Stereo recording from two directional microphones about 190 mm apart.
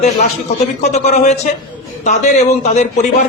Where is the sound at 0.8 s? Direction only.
35° left (ahead or behind).